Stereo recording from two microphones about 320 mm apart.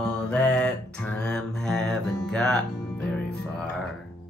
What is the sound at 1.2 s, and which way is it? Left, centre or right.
Music, centre.